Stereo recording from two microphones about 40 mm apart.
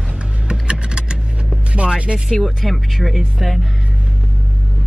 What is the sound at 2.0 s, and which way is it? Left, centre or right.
Speech, right.